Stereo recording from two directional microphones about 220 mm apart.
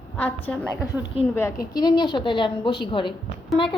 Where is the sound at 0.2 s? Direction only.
10° left (ahead or behind).